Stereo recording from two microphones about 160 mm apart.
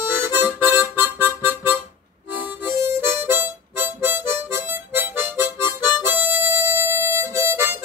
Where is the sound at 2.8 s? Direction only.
15° right (ahead or behind).